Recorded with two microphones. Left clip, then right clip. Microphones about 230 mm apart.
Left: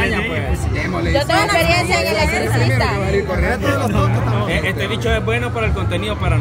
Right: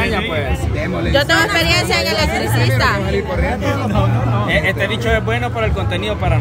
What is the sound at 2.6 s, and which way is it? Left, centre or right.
Speech, right.